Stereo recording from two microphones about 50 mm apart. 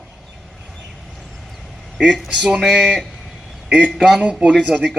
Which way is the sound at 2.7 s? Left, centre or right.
Centre.